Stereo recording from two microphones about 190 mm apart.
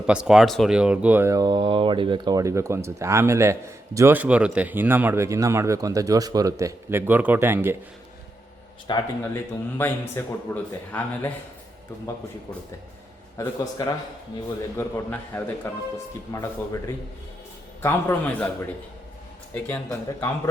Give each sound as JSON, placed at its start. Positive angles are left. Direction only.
{"t": 0.0, "sound": "speech", "side_deg": -5}
{"t": 8.9, "sound": "a man's voice", "side_deg": 15}
{"t": 13.3, "sound": "a man's voice", "side_deg": 20}
{"t": 19.5, "sound": "a man's voice", "side_deg": 10}